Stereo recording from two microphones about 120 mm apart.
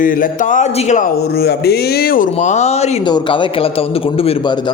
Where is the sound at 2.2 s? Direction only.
85° left.